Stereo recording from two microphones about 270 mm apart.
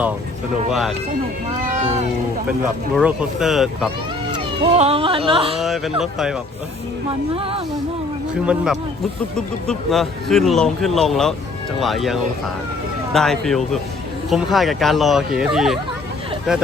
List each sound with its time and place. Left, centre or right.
0.7 s speech: centre
1.7 s speech: right
2.5 s speech: centre
4.4 s speech: right
5.5 s speech: centre
7.3 s speech: centre
8.4 s speech: centre